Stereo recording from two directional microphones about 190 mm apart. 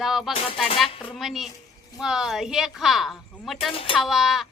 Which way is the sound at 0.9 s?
30° left (ahead or behind).